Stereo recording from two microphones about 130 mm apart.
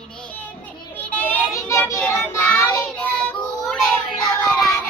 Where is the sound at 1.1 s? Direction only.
15° left (ahead or behind).